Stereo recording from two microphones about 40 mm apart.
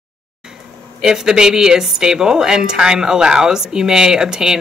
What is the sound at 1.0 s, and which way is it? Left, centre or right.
Speech, centre.